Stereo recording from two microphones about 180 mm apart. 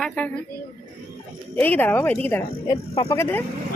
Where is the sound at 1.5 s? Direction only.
10° left (ahead or behind).